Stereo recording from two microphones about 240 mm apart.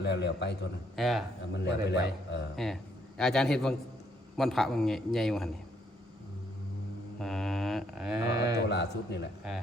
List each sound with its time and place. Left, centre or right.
0.0 s a man's voice: left
0.9 s mantra: centre
1.6 s a man's voice: left
2.6 s mantra: centre
7.2 s mantra: centre
8.5 s a man's voice: left